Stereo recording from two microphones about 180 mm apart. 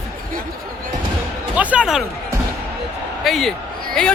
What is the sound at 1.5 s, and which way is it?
Speech, 5° right (ahead or behind).